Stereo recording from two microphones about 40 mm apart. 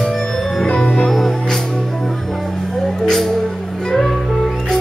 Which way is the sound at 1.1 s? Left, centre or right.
Centre.